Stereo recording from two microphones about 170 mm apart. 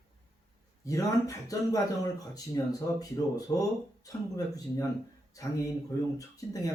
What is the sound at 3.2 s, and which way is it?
Speech, 20° left (ahead or behind).